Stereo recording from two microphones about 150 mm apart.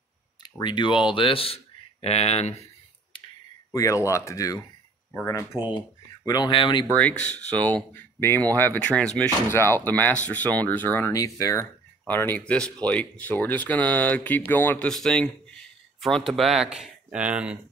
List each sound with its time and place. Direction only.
0.4 s speech: 30° left (ahead or behind)
3.7 s speech: 20° left (ahead or behind)
6.9 s speech: 10° left (ahead or behind); by 17.6 s 5° right (ahead or behind)